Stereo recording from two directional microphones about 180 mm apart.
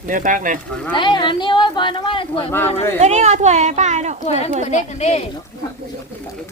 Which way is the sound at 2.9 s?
40° right (ahead or behind).